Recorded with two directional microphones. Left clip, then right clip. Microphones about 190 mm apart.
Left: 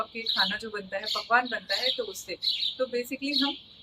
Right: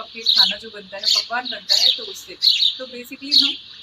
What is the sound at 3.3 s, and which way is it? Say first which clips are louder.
Speech: right 12 dB; 45° right (ahead or behind).